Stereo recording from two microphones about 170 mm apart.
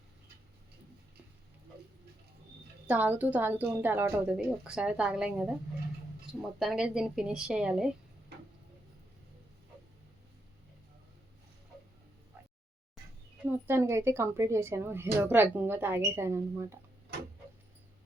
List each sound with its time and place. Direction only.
2.8 s a woman's voice: 10° right (ahead or behind)
6.6 s a woman's voice: 5° right (ahead or behind)
8.3 s tick-tock: 70° right (ahead or behind)
13.4 s a woman's voice: 15° right (ahead or behind)